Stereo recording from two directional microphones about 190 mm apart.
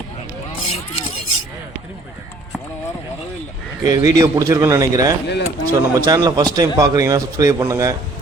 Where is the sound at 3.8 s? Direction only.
20° right (ahead or behind).